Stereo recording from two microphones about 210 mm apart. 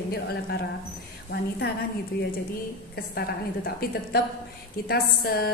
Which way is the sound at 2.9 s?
45° left (ahead or behind).